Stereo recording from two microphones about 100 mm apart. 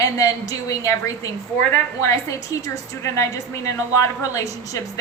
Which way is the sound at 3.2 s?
30° left (ahead or behind).